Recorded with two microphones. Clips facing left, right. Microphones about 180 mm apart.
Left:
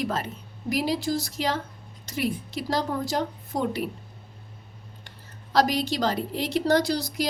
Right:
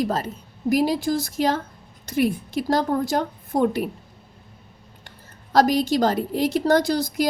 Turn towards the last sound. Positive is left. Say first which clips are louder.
# right 4 dB
turn(degrees=-50)  # may be behind; listen again after turning